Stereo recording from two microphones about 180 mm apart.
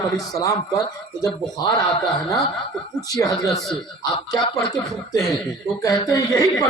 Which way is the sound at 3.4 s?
Centre (ahead or behind).